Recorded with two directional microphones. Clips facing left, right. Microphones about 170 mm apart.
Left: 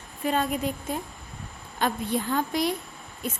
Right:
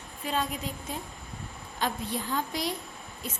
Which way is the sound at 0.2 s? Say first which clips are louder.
Left 6 dB; 55° left (ahead or behind).